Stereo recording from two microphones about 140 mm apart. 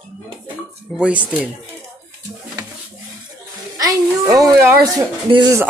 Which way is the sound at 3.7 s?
25° right (ahead or behind).